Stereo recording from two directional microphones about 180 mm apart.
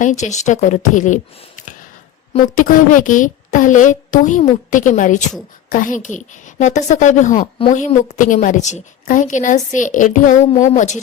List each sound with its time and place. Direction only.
0.0 s a woman's voice: 40° left (ahead or behind)
2.6 s a woman's voice: 45° left (ahead or behind)